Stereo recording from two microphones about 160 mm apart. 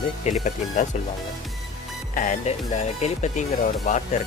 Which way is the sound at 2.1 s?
50° left (ahead or behind).